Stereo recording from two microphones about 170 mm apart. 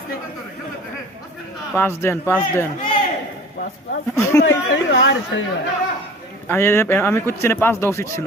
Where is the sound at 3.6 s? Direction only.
80° left.